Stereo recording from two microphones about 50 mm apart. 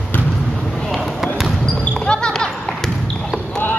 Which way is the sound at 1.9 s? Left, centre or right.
Centre.